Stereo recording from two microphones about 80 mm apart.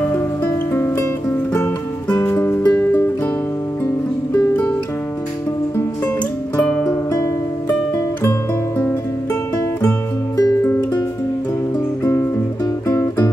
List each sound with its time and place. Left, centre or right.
0.7 s music: left
2.0 s music: left
2.3 s music: left
2.7 s music: left
6.5 s music: centre
8.2 s music: left
10.6 s music: left
12.0 s music: left